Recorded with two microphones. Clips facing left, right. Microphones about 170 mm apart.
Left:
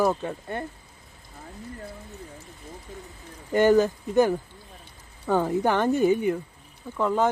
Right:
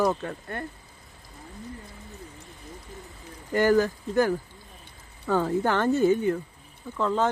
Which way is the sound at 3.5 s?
20° left (ahead or behind).